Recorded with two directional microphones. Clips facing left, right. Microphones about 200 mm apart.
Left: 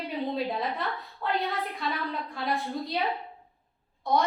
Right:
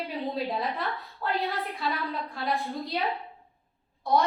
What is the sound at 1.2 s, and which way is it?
A woman's voice, centre (ahead or behind).